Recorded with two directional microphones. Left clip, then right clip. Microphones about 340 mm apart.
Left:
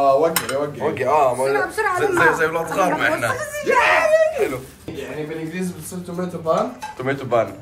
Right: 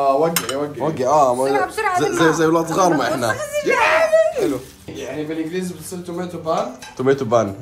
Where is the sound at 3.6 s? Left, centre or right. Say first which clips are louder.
Even; right.